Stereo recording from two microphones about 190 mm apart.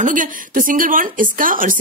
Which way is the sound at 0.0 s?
45° right (ahead or behind).